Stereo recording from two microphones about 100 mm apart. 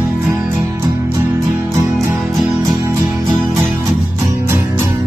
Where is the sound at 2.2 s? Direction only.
5° right (ahead or behind).